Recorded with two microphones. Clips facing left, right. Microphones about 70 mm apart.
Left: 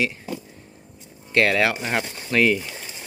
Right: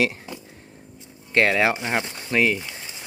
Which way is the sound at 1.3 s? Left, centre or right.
Right.